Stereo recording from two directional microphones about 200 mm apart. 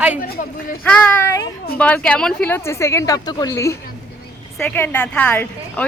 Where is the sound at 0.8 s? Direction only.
10° left (ahead or behind).